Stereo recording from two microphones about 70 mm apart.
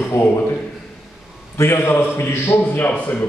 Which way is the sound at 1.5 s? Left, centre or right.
Left.